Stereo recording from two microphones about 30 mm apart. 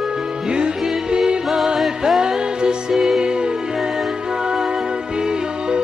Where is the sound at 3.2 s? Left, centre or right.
Right.